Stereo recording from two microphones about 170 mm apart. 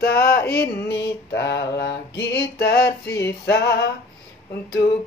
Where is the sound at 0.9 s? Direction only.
75° left (ahead or behind).